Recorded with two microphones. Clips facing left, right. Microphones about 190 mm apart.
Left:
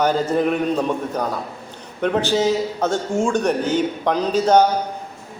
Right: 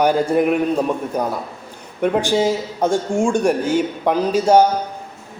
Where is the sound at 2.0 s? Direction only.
10° right (ahead or behind).